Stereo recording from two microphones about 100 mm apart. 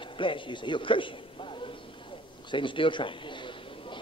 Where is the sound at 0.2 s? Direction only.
55° left (ahead or behind).